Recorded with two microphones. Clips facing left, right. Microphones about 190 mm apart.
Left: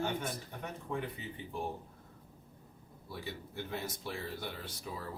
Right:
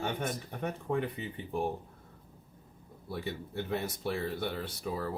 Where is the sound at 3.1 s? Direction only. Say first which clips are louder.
Right 6 dB; 60° right (ahead or behind).